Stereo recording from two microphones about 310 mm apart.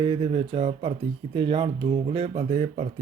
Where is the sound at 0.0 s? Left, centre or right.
Centre.